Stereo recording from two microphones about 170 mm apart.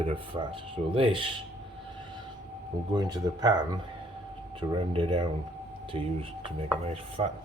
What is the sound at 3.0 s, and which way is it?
Speech, 25° right (ahead or behind).